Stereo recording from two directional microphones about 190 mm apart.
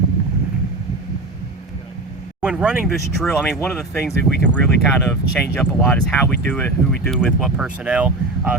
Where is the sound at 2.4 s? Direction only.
5° right (ahead or behind).